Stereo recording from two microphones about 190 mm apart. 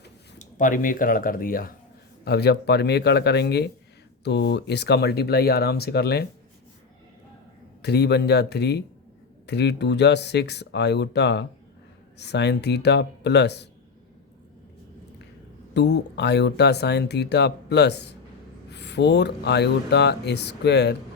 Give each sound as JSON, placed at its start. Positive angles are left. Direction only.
{"t": 0.3, "sound": "speech", "side_deg": 40}
{"t": 7.8, "sound": "speech", "side_deg": 60}
{"t": 15.7, "sound": "speech", "side_deg": 65}